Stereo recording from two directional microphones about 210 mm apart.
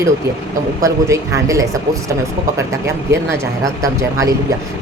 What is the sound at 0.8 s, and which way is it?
Speech, 15° right (ahead or behind).